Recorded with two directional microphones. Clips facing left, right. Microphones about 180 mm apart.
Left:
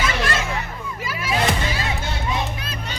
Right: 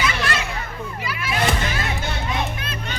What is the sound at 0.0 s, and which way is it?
Children playing, 45° left (ahead or behind).